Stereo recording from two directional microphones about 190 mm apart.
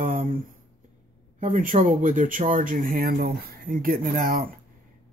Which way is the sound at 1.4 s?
45° right (ahead or behind).